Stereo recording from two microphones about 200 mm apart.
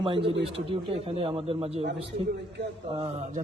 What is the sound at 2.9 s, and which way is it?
Speech, 35° right (ahead or behind).